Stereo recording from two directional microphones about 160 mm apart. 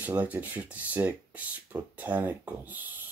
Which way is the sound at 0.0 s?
10° right (ahead or behind).